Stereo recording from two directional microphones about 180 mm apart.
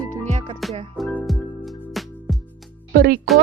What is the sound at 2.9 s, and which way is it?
Speech, 60° right (ahead or behind).